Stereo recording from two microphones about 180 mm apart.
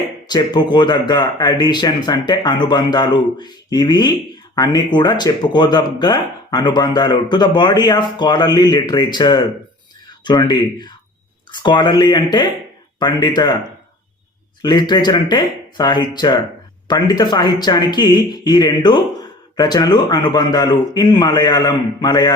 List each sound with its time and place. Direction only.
0.3 s speech: 25° left (ahead or behind)
14.6 s speech: 25° left (ahead or behind)